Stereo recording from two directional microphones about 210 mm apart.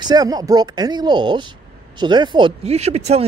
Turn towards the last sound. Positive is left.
turn(degrees=-30)  # may be behind; listen again after turning